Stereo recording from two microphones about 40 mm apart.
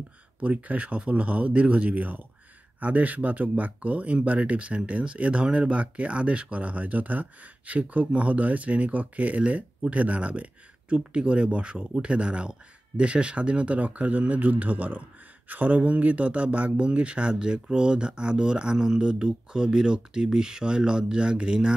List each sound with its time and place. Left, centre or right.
0.4 s speech: right